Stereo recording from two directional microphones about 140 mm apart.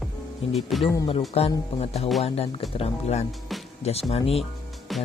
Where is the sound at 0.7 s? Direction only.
Centre (ahead or behind).